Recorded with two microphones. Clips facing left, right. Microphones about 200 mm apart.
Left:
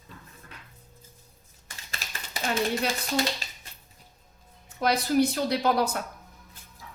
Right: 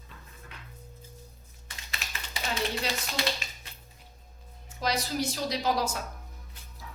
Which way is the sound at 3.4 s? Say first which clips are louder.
Even; 35° left (ahead or behind).